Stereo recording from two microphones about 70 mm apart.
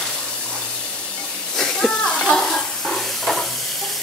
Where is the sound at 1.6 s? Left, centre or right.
Centre.